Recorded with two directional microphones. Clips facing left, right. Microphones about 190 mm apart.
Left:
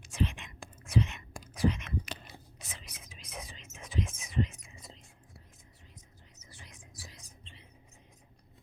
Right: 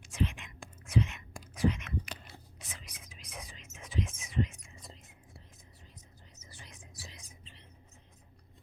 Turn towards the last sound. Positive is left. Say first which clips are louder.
# left 1 dB
turn(degrees=0)  # may be behind; listen again after turning